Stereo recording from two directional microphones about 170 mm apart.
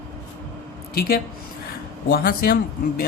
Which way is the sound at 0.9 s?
60° left (ahead or behind).